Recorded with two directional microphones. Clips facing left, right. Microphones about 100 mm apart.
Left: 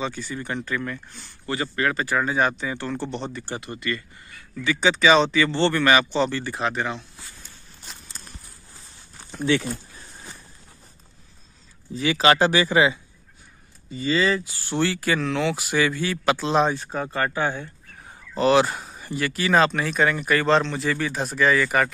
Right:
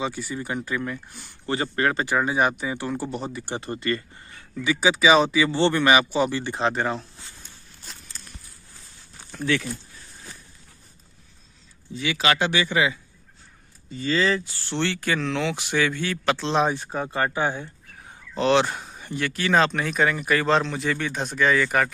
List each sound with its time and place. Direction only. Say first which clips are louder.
0.0 s speech: right 1 dB; 15° right (ahead or behind)
1.5 s speech: right 1 dB; 30° right (ahead or behind)
2.0 s speech: even; 20° right (ahead or behind)
3.5 s speech: right 4 dB; 35° right (ahead or behind)
4.6 s speech: even; 10° right (ahead or behind); by 7.1 s 35° right (ahead or behind)
9.3 s speech: left 3 dB; 20° left (ahead or behind)
11.9 s speech: left 4 dB; 40° left (ahead or behind)
13.8 s speech: left 1 dB; 5° left (ahead or behind)
16.6 s speech: even; 15° right (ahead or behind)
18.0 s speech: left 2 dB; centre (ahead or behind)